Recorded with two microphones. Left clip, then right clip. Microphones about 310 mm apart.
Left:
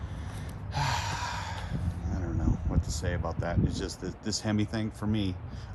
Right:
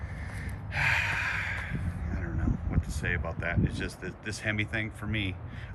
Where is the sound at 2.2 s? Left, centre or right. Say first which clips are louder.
Left 2 dB; centre.